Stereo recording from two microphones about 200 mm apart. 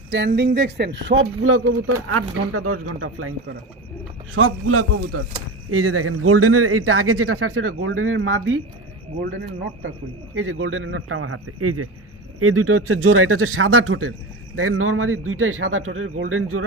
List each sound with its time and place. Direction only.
0.3 s speech: 60° right (ahead or behind); by 3.3 s 90° right
4.4 s speech: 90° right; by 8.6 s 75° right (ahead or behind)
9.2 s speech: 60° right (ahead or behind)
10.3 s speech: 90° right
12.4 s speech: 90° right